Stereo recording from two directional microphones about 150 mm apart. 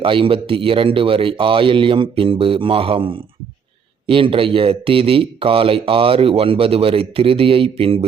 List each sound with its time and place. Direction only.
0.0 s speech: 35° right (ahead or behind)